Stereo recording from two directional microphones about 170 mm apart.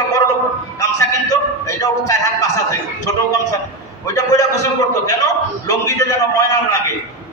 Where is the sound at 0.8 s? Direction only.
20° left (ahead or behind).